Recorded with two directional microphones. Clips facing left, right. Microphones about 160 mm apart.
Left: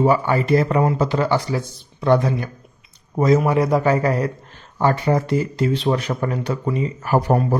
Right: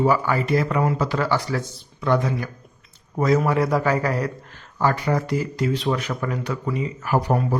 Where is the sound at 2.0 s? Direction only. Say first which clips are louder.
Left 4 dB; 30° left (ahead or behind).